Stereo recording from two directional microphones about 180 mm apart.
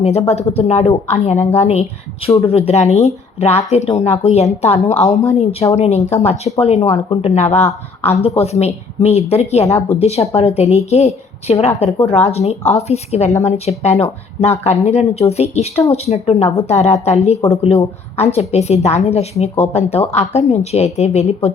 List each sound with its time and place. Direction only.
0.0 s speech: 35° left (ahead or behind)